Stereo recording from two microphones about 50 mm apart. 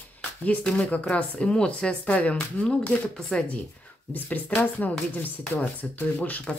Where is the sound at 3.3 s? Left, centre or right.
Centre.